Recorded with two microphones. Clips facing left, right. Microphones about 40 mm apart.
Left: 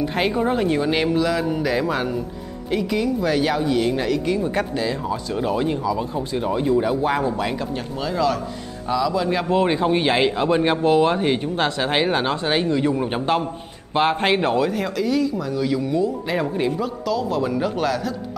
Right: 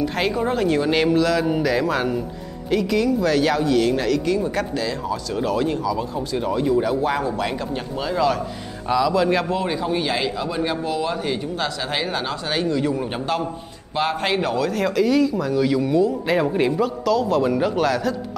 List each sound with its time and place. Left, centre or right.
0.0 s a man's voice: centre
5.9 s speech: centre
6.5 s speech: centre
7.4 s a man's voice: centre
9.5 s a man's voice: left
14.7 s a man's voice: centre
16.5 s speech: centre
16.8 s a man's voice: centre